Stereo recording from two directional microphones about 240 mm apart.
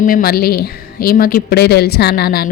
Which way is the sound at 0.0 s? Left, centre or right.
Left.